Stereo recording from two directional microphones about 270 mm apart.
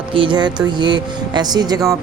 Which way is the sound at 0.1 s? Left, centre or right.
Centre.